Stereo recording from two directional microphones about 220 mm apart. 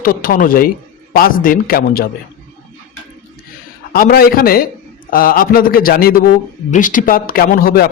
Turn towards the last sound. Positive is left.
turn(degrees=40)  # may be behind; listen again after turning